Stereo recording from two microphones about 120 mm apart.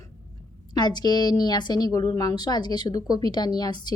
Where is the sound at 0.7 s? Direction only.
35° left (ahead or behind).